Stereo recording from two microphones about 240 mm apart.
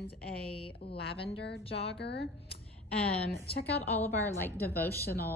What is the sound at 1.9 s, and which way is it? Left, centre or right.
Speech, left.